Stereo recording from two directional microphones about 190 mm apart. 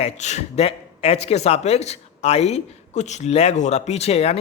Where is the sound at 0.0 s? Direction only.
35° left (ahead or behind).